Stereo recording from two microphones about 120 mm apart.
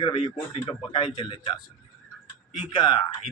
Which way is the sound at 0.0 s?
55° left (ahead or behind).